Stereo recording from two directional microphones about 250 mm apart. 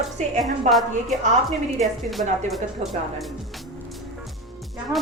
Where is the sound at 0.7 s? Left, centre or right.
Right.